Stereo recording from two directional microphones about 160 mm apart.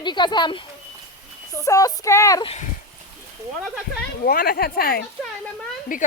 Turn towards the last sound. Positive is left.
turn(degrees=55)  # may be behind; listen again after turning